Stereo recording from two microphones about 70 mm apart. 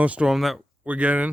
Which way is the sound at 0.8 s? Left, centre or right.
Right.